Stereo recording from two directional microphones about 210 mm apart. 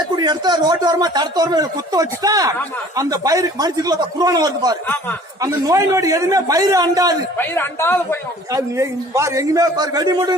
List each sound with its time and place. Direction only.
0.2 s a man's voice: 20° right (ahead or behind)
7.3 s speech: 10° left (ahead or behind)
8.5 s a man's voice: 15° right (ahead or behind)